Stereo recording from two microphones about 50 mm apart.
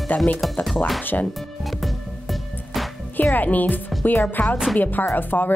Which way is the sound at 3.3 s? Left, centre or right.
Left.